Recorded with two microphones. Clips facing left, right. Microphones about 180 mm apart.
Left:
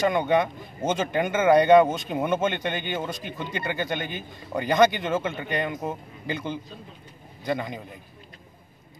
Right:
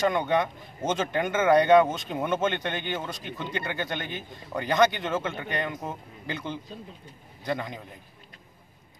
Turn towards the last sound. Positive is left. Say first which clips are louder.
# left 3 dB
turn(degrees=10)  # may be behind; listen again after turning